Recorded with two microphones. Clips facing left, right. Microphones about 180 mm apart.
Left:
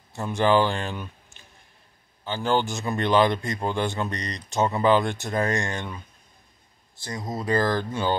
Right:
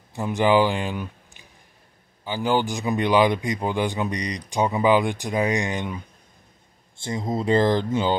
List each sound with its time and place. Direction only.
0.1 s speech: 15° right (ahead or behind)
7.0 s speech: 25° right (ahead or behind)